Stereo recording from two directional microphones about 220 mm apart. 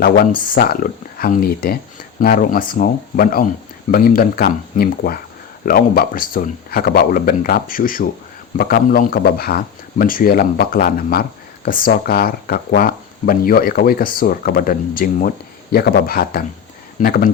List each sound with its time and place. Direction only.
0.0 s speech: 40° left (ahead or behind)